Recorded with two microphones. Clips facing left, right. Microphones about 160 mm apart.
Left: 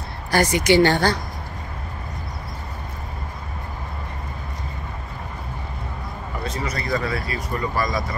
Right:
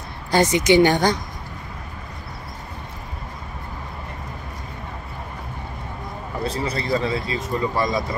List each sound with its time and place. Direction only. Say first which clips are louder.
0.3 s speech: right 1 dB; 20° right (ahead or behind)
6.4 s speech: right 3 dB; 30° right (ahead or behind)